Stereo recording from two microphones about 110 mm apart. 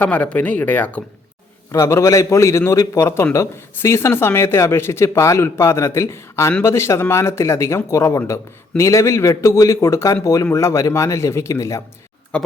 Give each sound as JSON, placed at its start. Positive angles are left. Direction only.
{"t": 0.0, "sound": "speech", "side_deg": 10}
{"t": 1.7, "sound": "speech", "side_deg": 25}
{"t": 12.3, "sound": "a sound", "side_deg": 10}